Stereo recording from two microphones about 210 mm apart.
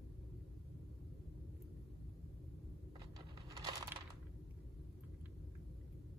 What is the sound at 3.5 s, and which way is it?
Crushing, 15° right (ahead or behind).